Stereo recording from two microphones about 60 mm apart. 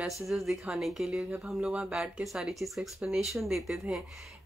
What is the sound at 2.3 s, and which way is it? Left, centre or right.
Speech, centre.